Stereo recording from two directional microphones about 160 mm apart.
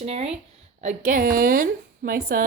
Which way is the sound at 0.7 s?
55° right (ahead or behind).